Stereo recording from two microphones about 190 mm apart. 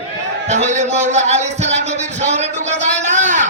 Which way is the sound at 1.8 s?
35° right (ahead or behind).